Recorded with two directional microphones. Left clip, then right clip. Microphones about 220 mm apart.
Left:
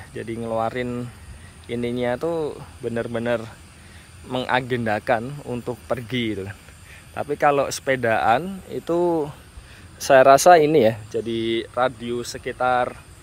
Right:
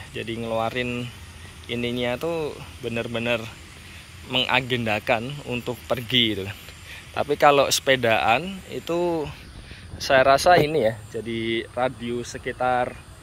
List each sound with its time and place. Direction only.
0.1 s speech: 20° left (ahead or behind)
10.0 s speech: 50° left (ahead or behind)
11.2 s speech: 25° left (ahead or behind)